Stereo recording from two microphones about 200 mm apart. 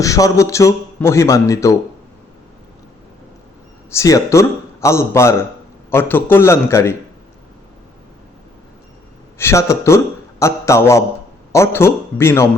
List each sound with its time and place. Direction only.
0.0 s a man's voice: 15° left (ahead or behind)
3.9 s a man's voice: 15° left (ahead or behind)
9.4 s a man's voice: 15° left (ahead or behind)